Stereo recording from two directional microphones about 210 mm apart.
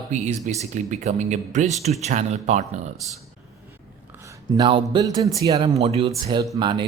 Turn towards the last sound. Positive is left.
turn(degrees=-20)  # may be behind; listen again after turning